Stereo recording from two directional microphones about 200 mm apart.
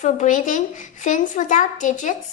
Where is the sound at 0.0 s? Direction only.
35° left (ahead or behind).